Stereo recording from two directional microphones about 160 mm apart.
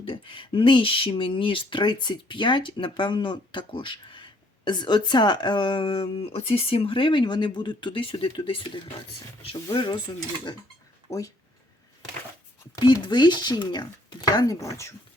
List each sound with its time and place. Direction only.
0.0 s speech: 35° left (ahead or behind)
12.7 s speech: 25° left (ahead or behind)